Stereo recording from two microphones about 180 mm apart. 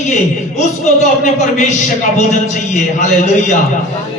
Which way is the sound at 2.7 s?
40° left (ahead or behind).